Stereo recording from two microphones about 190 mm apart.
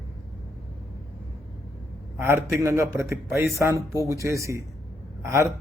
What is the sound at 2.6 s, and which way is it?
Speech, 15° right (ahead or behind).